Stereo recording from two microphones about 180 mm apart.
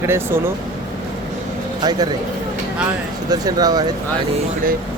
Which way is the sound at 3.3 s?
20° right (ahead or behind).